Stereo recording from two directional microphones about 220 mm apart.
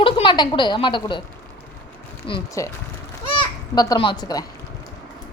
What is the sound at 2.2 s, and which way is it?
Speech, 25° left (ahead or behind).